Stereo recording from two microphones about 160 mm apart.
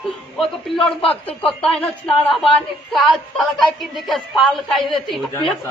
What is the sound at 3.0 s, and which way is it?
Speech, centre (ahead or behind).